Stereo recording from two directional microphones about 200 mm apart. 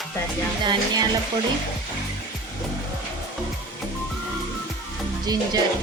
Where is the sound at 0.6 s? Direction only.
20° right (ahead or behind).